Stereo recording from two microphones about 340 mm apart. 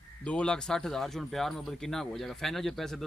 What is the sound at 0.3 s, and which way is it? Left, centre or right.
Speech, centre.